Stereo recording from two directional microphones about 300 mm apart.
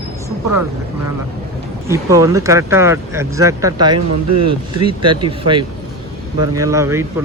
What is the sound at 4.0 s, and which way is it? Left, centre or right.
Speech, right.